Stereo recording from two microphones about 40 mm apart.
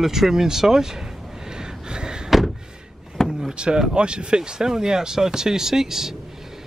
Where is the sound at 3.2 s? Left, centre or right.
Right.